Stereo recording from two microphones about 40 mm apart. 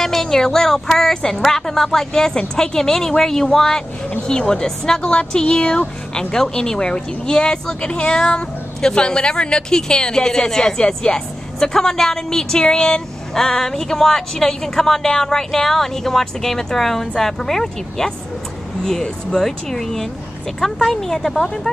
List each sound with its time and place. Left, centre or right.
0.0 s a woman's voice: centre